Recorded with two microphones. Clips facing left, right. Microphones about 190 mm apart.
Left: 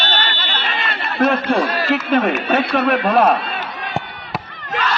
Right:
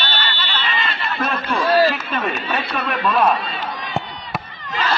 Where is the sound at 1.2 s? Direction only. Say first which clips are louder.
Left 6 dB; 60° left (ahead or behind).